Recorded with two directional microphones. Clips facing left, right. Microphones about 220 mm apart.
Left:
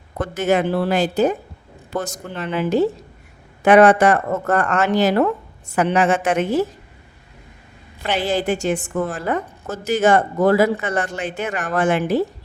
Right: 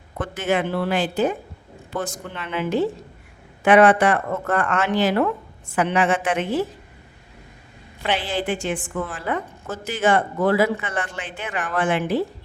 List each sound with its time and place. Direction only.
0.2 s a woman's voice: 40° left (ahead or behind)
8.0 s a woman's voice: 40° left (ahead or behind)